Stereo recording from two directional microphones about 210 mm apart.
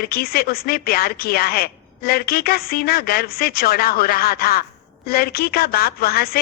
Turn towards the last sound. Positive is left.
turn(degrees=45)  # may be behind; listen again after turning